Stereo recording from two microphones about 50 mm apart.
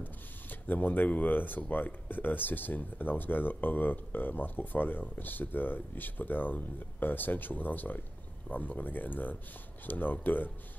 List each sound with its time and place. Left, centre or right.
0.0 s speech: left